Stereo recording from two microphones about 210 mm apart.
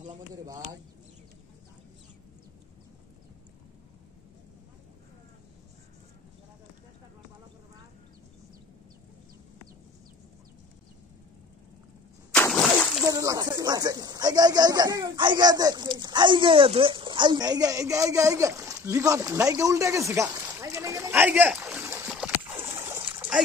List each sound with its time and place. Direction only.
12.4 s splash: 10° left (ahead or behind)
13.0 s speech: 15° right (ahead or behind)
22.8 s splash: 15° right (ahead or behind)